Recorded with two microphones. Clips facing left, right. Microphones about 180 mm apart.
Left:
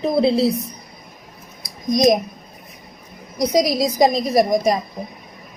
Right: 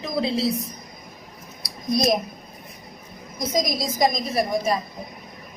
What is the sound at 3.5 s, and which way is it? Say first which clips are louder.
A woman's voice: left 7 dB; 35° left (ahead or behind).